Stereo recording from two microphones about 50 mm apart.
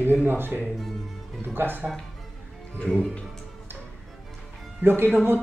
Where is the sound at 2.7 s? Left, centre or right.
Left.